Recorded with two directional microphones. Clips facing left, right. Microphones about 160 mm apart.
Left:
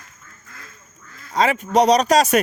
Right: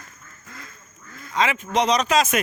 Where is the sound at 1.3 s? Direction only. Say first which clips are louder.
Left 4 dB; 40° left (ahead or behind).